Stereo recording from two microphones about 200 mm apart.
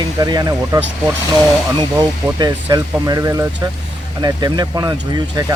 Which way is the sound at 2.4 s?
20° right (ahead or behind).